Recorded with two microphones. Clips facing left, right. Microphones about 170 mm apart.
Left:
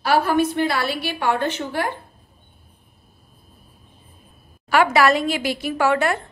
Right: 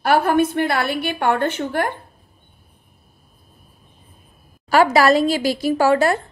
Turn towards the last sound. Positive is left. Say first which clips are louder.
# right 4 dB
turn(degrees=-35)  # may be behind; listen again after turning